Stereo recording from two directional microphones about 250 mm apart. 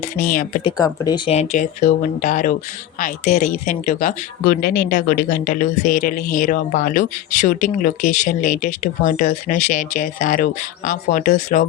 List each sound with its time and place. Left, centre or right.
0.2 s speech: left
0.6 s speech: centre
3.7 s speech: left
5.8 s speech: left
6.3 s speech: left